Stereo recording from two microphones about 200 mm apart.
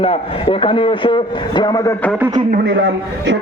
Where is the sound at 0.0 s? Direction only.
30° left (ahead or behind); by 2.1 s 10° left (ahead or behind).